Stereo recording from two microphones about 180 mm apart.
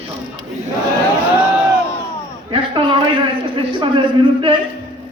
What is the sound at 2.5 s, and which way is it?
A man's voice, 30° right (ahead or behind).